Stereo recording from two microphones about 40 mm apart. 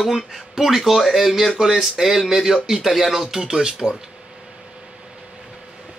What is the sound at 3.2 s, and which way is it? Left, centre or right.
Speech, centre.